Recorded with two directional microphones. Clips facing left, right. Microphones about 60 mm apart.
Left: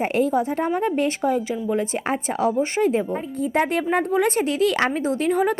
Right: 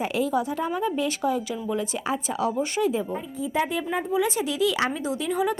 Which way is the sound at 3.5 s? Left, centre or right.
Left.